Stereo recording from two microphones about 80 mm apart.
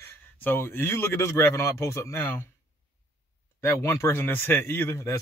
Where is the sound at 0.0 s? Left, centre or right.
Left.